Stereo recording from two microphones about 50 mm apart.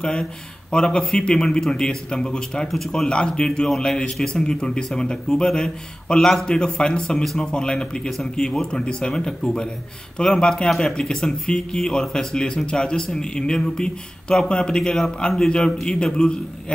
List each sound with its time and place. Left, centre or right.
0.0 s a man's voice: centre